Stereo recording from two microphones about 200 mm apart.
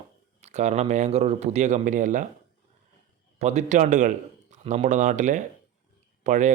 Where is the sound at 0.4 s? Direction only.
35° right (ahead or behind).